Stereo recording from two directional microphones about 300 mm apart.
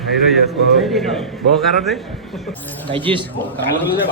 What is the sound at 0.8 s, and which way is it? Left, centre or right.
A man's voice, centre.